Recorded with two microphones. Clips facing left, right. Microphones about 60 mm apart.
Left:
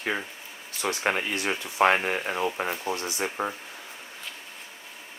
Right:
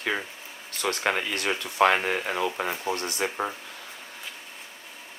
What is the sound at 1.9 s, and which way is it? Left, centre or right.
Speech, right.